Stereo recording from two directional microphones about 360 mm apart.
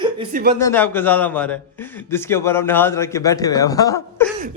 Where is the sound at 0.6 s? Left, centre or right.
Centre.